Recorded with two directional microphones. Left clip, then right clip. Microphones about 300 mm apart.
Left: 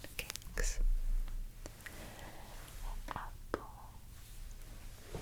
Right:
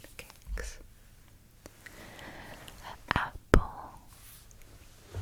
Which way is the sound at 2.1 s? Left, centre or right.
Right.